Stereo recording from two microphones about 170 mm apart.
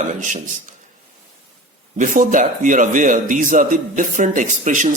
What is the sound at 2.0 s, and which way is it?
A man's voice, 50° right (ahead or behind).